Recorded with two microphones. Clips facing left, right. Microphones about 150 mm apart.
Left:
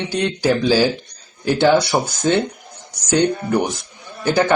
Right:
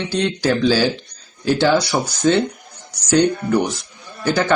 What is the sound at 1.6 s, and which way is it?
Speech, 20° left (ahead or behind).